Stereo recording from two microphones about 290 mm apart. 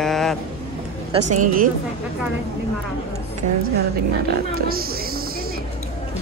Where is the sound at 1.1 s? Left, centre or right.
Right.